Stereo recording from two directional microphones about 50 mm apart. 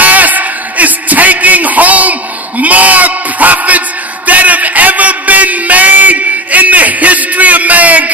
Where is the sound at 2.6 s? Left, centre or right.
Right.